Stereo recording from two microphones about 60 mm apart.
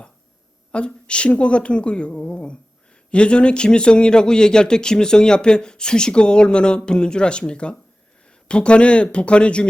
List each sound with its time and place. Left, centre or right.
0.7 s speech: centre